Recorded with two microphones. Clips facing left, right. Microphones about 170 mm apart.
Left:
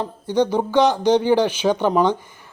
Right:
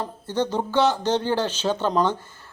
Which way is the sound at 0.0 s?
15° left (ahead or behind).